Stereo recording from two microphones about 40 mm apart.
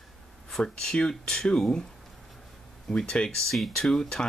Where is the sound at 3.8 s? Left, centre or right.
Centre.